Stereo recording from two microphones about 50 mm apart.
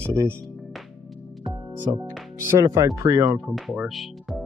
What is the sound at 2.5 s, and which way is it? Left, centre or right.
Speech, right.